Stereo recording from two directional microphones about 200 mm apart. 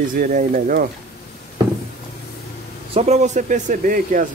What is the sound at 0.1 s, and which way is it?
Speech, 40° right (ahead or behind).